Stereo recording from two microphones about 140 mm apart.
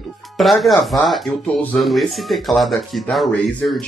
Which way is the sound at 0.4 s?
Centre (ahead or behind).